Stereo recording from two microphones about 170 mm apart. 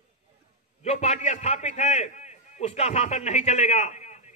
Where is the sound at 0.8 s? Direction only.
40° left (ahead or behind).